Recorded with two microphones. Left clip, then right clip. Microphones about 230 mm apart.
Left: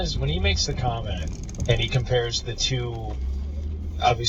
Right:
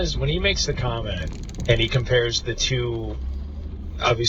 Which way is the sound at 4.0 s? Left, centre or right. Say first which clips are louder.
Even; right.